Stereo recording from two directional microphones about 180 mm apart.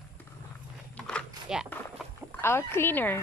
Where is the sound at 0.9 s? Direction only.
5° left (ahead or behind).